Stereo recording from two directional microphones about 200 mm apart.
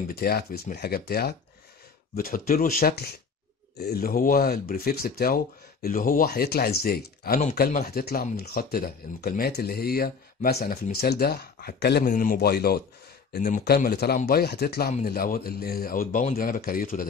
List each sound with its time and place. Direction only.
0.1 s speech: 50° left (ahead or behind)
12.0 s speech: 45° left (ahead or behind)